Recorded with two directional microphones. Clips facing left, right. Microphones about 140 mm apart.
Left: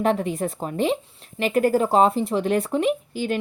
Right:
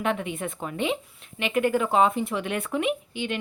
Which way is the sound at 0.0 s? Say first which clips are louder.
Left 6 dB; 35° left (ahead or behind).